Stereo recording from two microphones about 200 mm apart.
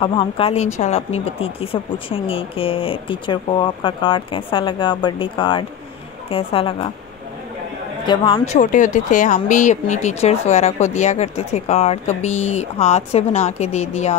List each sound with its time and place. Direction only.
0.0 s speech: 25° left (ahead or behind)
8.1 s speech: 20° left (ahead or behind)
8.5 s speech: 40° left (ahead or behind)